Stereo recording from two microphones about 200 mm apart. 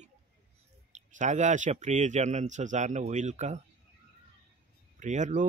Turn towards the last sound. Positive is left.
turn(degrees=-40)  # may be behind; listen again after turning